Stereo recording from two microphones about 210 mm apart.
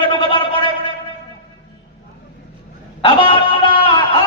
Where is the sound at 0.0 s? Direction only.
25° left (ahead or behind).